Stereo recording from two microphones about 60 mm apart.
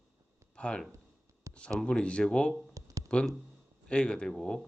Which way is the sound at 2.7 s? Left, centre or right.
Right.